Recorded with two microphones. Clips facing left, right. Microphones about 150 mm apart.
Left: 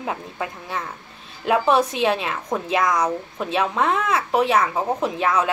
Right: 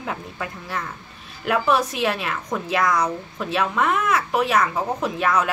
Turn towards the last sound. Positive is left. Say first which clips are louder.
# left 1 dB
turn(degrees=20)  # may be behind; listen again after turning